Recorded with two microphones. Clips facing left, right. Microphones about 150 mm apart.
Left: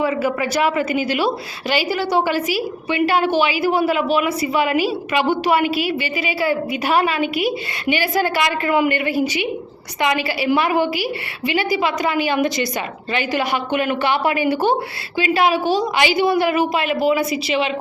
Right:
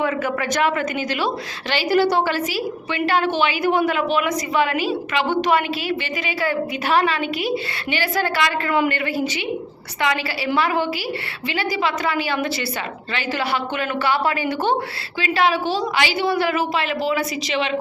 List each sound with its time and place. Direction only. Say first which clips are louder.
0.0 s a woman's voice: left 3 dB; 10° left (ahead or behind)